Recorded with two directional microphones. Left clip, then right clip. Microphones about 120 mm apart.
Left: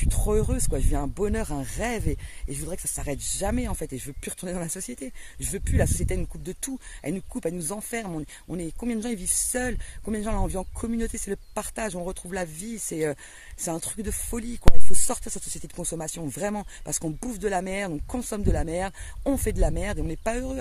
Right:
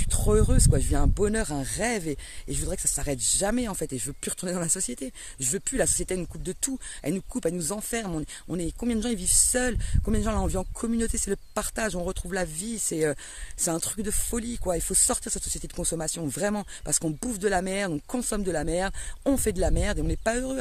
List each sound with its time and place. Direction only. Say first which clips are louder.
0.0 s speech: right 1 dB; 30° right (ahead or behind)